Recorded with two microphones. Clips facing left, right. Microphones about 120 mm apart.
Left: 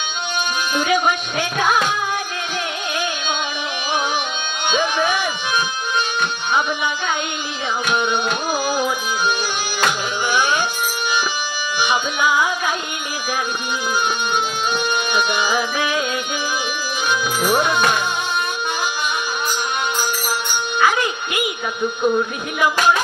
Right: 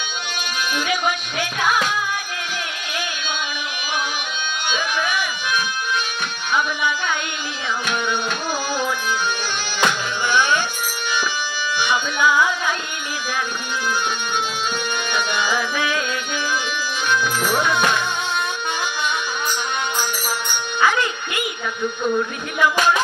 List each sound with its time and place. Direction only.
0.7 s music: 25° left (ahead or behind)
4.7 s music: 25° left (ahead or behind)
7.9 s music: 15° left (ahead or behind)
9.8 s music: 15° left (ahead or behind)
11.8 s music: 15° left (ahead or behind)
15.1 s music: 15° left (ahead or behind)
17.1 s music: 15° left (ahead or behind)
20.8 s speech: 15° left (ahead or behind)